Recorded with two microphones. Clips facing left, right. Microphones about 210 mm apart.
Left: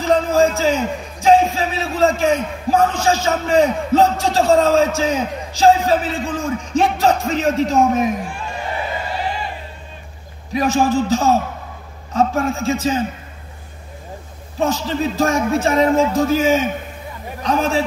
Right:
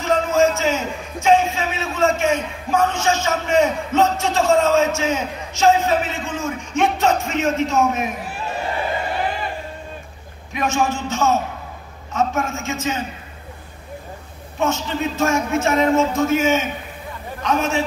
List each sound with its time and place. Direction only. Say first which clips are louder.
0.0 s a man's voice: left 2 dB; 35° left (ahead or behind)
10.5 s a man's voice: left 5 dB; 35° left (ahead or behind)
14.6 s a man's voice: left 2 dB; 35° left (ahead or behind)